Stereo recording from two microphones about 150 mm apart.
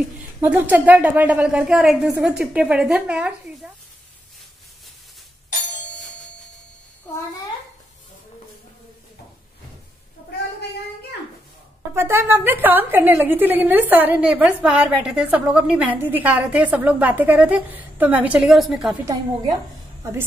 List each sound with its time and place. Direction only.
0.4 s a woman's voice: 10° right (ahead or behind)
11.9 s a woman's voice: 15° right (ahead or behind)
20.0 s a woman's voice: 20° right (ahead or behind)